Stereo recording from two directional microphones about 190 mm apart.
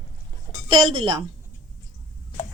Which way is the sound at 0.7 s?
25° right (ahead or behind).